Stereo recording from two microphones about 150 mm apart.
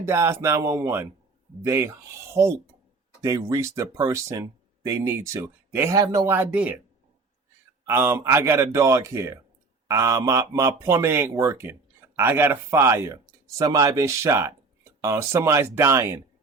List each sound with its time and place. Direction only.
0.0 s speech: 15° right (ahead or behind)
7.9 s speech: 15° right (ahead or behind)